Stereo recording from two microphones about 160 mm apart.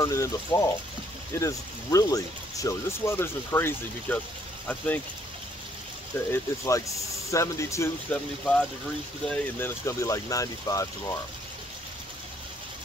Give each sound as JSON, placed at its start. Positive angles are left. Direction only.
{"t": 0.0, "sound": "speech", "side_deg": 20}
{"t": 6.3, "sound": "speech", "side_deg": 15}
{"t": 8.1, "sound": "speech", "side_deg": 5}